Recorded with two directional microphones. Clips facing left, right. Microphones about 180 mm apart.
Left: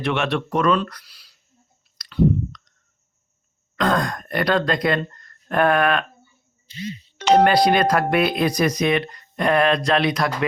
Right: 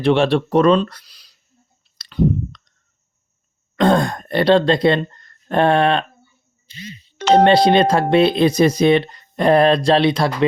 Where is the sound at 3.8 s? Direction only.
30° right (ahead or behind).